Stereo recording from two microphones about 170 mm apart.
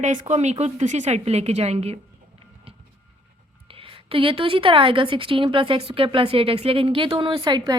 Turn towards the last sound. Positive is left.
turn(degrees=-25)  # may be behind; listen again after turning